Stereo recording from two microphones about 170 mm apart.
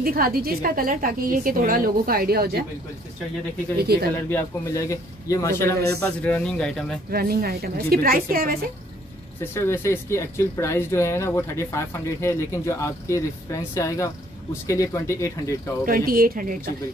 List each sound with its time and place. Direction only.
0.0 s a woman's voice: 60° right (ahead or behind)
3.8 s speech: 70° right (ahead or behind)
4.3 s speech: 15° left (ahead or behind)
7.1 s a woman's voice: 65° right (ahead or behind)
9.4 s speech: 15° left (ahead or behind)
15.8 s a woman's voice: 55° right (ahead or behind)